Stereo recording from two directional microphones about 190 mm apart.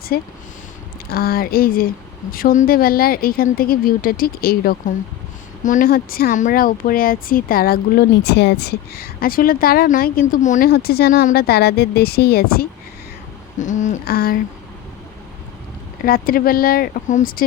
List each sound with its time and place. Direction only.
0.1 s speech: 50° left (ahead or behind)
13.6 s speech: 40° left (ahead or behind)
16.0 s speech: 50° left (ahead or behind)